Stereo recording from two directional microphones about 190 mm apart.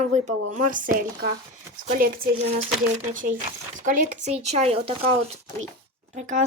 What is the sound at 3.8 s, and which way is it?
Speech, 45° right (ahead or behind).